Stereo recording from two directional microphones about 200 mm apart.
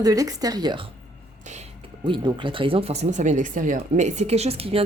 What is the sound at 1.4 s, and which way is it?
Speech, 35° right (ahead or behind).